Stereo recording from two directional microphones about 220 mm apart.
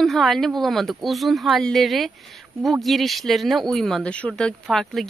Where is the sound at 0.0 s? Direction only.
Centre (ahead or behind).